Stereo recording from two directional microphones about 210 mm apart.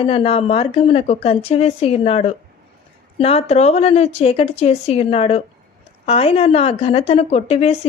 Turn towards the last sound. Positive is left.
turn(degrees=30)  # may be behind; listen again after turning